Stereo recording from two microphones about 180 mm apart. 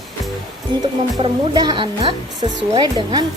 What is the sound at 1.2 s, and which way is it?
Speech, 25° right (ahead or behind).